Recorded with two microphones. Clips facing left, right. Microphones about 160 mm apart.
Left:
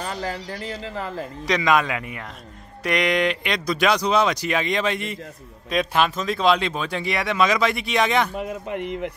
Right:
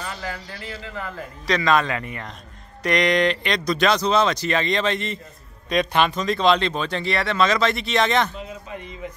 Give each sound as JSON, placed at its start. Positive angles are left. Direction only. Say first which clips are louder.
{"t": 0.0, "sound": "speech", "louder": "left 3 dB", "side_deg": 35}
{"t": 1.5, "sound": "speech", "louder": "even", "side_deg": 15}
{"t": 8.4, "sound": "speech", "louder": "left 7 dB", "side_deg": 60}